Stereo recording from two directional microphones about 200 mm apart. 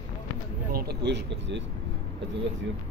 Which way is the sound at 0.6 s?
50° right (ahead or behind).